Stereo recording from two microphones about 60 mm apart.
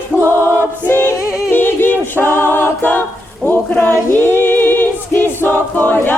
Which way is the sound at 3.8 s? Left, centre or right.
Left.